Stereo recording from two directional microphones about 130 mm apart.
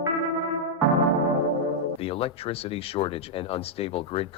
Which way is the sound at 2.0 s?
50° left (ahead or behind).